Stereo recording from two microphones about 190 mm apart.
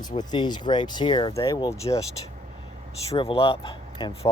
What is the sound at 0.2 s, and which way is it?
Speech, 20° left (ahead or behind).